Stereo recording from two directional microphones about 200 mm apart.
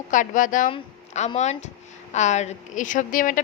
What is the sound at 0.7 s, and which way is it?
A woman's voice, 30° left (ahead or behind).